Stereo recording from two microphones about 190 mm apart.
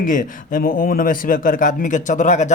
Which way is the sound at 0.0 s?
45° left (ahead or behind).